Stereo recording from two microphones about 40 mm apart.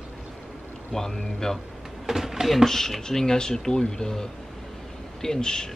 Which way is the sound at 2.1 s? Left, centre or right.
Centre.